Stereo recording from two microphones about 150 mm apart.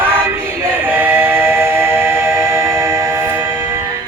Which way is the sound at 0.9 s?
10° right (ahead or behind).